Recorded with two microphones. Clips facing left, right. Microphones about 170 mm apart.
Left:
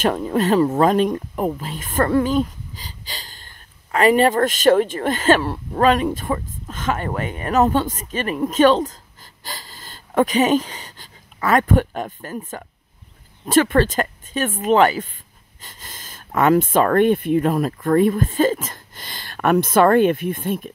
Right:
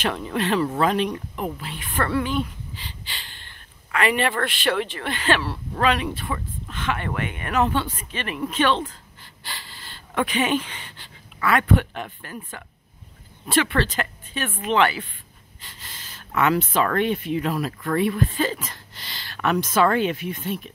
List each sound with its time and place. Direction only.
0.0 s speech: 45° left (ahead or behind)